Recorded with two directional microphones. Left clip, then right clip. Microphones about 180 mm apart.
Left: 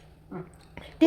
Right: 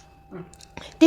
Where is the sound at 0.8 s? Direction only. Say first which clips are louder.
Right 5 dB; 20° right (ahead or behind).